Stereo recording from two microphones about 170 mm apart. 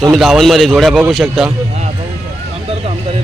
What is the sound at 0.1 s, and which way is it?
A man's voice, centre (ahead or behind).